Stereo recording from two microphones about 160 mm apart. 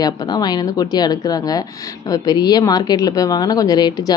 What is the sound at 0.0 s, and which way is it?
Speech, 25° left (ahead or behind).